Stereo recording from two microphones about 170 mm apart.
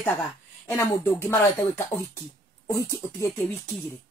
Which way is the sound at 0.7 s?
15° left (ahead or behind).